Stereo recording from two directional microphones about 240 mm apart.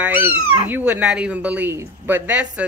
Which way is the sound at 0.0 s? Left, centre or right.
Centre.